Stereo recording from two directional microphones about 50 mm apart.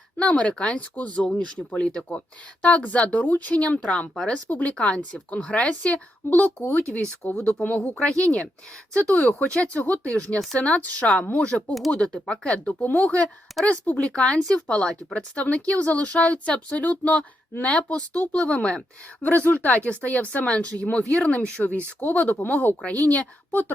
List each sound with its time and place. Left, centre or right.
0.2 s speech: left
14.1 s speech: centre
19.2 s speech: left